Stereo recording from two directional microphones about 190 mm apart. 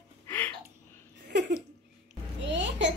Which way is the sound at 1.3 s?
65° right (ahead or behind).